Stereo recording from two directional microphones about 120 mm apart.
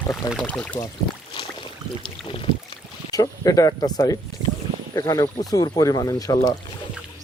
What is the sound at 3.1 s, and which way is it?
Speech, 30° left (ahead or behind).